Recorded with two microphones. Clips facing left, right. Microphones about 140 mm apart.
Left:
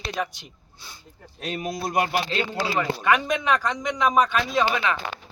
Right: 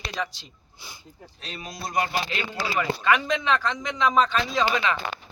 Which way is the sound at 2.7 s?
20° left (ahead or behind).